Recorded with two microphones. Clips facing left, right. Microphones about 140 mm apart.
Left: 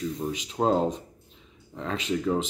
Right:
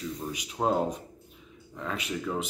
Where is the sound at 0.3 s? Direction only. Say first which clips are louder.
Left 3 dB; 25° left (ahead or behind).